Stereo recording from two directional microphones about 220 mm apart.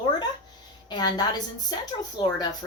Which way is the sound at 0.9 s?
20° left (ahead or behind).